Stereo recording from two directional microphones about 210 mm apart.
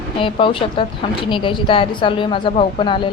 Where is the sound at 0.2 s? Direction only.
25° left (ahead or behind).